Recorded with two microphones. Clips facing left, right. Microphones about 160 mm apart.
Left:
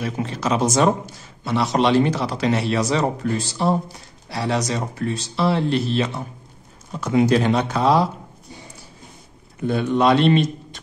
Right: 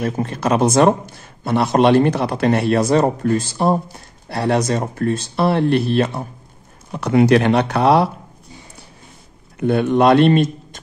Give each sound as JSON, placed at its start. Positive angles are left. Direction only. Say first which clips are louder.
{"t": 0.0, "sound": "a man's voice", "louder": "right 4 dB", "side_deg": -50}
{"t": 6.9, "sound": "a man's voice", "louder": "right 4 dB", "side_deg": -65}
{"t": 9.6, "sound": "a man's voice", "louder": "right 4 dB", "side_deg": -60}